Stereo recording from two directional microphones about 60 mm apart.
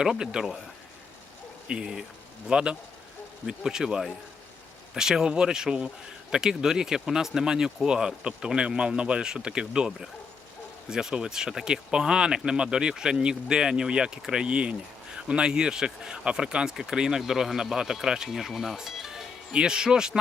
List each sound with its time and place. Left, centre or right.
0.0 s speech: centre
1.6 s speech: centre